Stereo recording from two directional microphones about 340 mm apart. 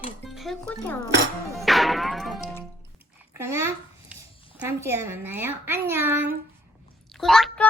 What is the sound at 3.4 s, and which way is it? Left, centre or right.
A child's voice, centre.